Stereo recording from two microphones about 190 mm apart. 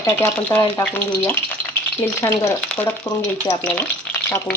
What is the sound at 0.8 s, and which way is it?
Frying, 10° left (ahead or behind).